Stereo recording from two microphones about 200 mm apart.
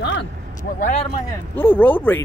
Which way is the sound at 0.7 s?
40° left (ahead or behind).